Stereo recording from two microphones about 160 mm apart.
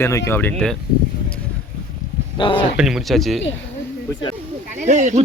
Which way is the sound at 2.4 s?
30° left (ahead or behind).